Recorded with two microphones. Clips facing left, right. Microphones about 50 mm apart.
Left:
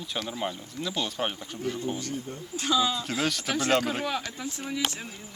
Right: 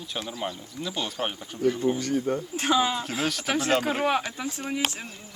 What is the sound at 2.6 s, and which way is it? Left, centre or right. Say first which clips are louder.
Speech: right 1 dB; right.